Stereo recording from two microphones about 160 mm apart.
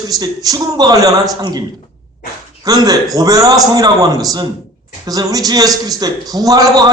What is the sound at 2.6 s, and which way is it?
A man's voice, 25° right (ahead or behind).